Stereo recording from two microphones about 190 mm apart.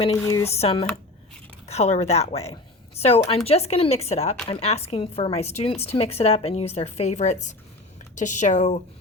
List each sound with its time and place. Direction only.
0.2 s speech: 15° left (ahead or behind)
0.5 s speech: 30° left (ahead or behind)